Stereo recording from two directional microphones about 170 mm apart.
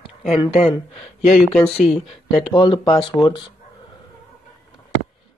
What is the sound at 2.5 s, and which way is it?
Speech, 30° left (ahead or behind).